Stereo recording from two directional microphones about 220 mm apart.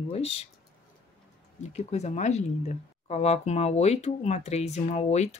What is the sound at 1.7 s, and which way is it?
Speech, 30° left (ahead or behind).